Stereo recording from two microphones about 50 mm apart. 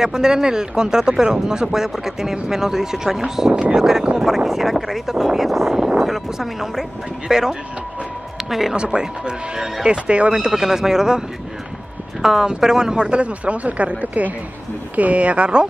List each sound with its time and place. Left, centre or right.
0.0 s speech: centre
4.5 s speech: centre
8.7 s speech: centre
10.3 s speech: centre